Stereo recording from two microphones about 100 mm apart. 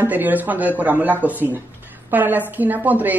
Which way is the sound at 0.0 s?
15° right (ahead or behind).